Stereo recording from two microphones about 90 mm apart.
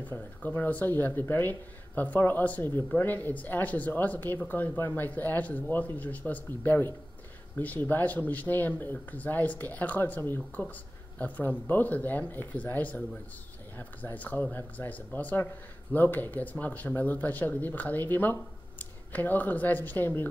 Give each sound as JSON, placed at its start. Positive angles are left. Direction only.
{"t": 0.4, "sound": "speech", "side_deg": 20}